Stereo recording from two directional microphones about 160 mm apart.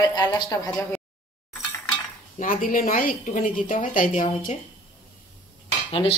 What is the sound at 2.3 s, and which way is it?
Speech, 55° left (ahead or behind).